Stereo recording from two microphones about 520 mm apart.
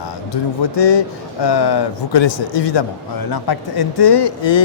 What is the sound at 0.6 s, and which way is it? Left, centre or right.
Speech, left.